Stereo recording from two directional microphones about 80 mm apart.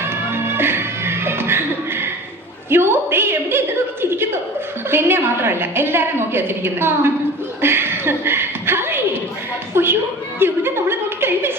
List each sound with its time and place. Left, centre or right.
0.0 s music: right
2.6 s a woman's voice: right
4.9 s a woman's voice: right
7.6 s a sound: right
9.7 s speech: right
10.4 s a sound: right